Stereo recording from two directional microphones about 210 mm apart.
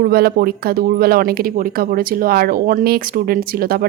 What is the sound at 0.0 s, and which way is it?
Speech, 45° right (ahead or behind).